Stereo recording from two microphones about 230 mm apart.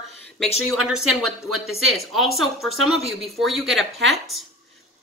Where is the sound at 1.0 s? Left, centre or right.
Right.